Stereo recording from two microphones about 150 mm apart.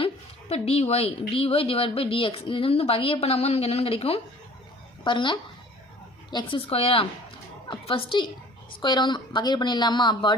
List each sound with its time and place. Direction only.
0.0 s a woman's voice: 40° left (ahead or behind)